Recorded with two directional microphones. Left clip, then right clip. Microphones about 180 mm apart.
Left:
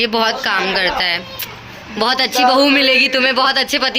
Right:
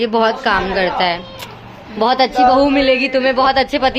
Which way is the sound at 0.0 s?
25° right (ahead or behind).